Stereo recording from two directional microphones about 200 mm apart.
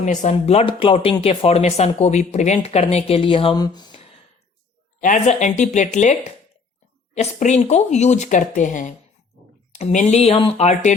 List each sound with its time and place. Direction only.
0.0 s speech: 35° left (ahead or behind)
4.9 s speech: 40° left (ahead or behind)